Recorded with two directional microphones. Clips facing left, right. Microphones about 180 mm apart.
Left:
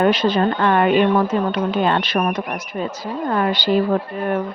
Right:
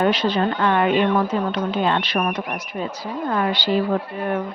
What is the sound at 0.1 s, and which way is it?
A woman's voice, 45° left (ahead or behind).